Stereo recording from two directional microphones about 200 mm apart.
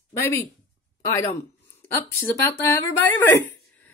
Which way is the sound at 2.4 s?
10° left (ahead or behind).